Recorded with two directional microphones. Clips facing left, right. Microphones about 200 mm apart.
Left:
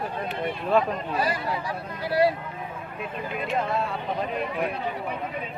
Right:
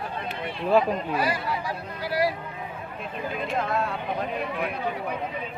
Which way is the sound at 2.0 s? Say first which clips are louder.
Left 3 dB; 25° left (ahead or behind).